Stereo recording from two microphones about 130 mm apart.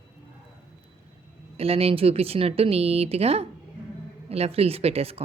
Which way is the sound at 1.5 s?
50° right (ahead or behind).